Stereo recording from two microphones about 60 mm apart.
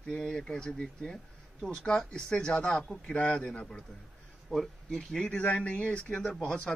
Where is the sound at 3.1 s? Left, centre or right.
Centre.